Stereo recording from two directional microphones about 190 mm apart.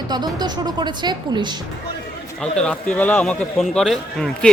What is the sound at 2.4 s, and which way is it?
A man's voice, 5° left (ahead or behind).